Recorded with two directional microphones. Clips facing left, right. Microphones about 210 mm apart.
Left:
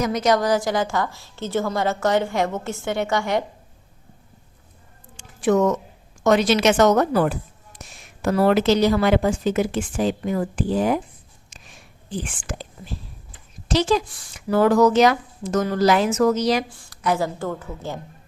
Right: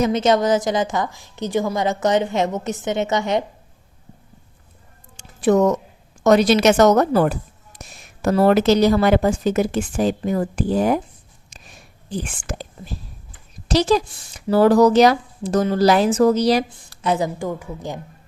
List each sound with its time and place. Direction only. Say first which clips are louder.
0.0 s a woman's voice: right 3 dB; 25° right (ahead or behind)
5.1 s a sound: right 2 dB; 35° right (ahead or behind)
6.2 s a woman's voice: right 3 dB; 40° right (ahead or behind)
12.1 s speech: right 2 dB; 40° right (ahead or behind)
13.7 s a woman's voice: right 3 dB; 35° right (ahead or behind); by 18.0 s 15° right (ahead or behind)